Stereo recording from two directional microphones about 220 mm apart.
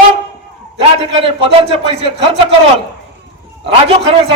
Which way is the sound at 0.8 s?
25° right (ahead or behind).